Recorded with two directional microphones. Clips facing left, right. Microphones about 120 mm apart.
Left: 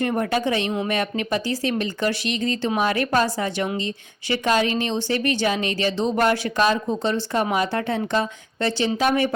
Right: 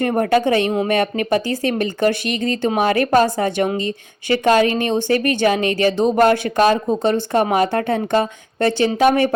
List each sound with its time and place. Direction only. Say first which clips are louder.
0.0 s speech: right 6 dB; 55° right (ahead or behind)